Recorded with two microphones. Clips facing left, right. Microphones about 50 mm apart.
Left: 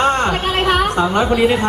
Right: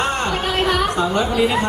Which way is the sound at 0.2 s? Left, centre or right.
Left.